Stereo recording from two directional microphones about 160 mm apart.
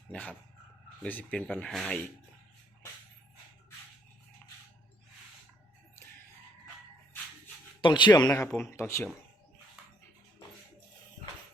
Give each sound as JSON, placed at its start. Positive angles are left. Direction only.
{"t": 0.1, "sound": "speech", "side_deg": 5}
{"t": 7.8, "sound": "speech", "side_deg": 30}